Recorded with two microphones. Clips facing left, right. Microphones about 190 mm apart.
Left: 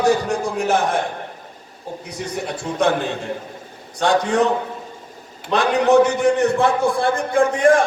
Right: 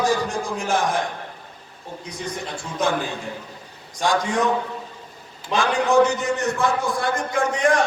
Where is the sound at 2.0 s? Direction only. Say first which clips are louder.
Left 4 dB; 70° left (ahead or behind).